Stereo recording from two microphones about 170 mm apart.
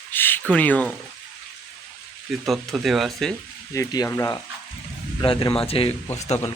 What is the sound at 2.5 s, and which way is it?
Speech, centre (ahead or behind).